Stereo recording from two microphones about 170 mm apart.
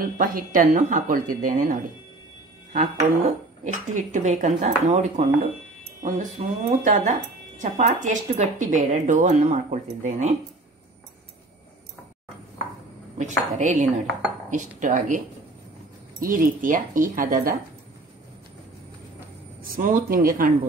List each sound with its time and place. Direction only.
0.0 s speech: 55° right (ahead or behind)
13.2 s speech: 45° right (ahead or behind)
19.6 s speech: 55° right (ahead or behind)